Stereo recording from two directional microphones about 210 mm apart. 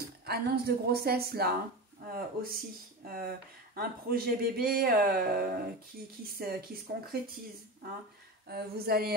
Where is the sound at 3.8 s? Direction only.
45° right (ahead or behind).